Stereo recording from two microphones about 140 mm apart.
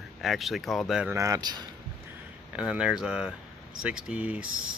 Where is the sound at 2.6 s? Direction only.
5° right (ahead or behind).